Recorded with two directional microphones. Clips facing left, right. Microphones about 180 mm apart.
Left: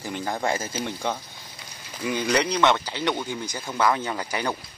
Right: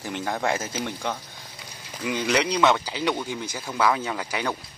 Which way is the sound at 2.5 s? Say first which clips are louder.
Even; 10° right (ahead or behind).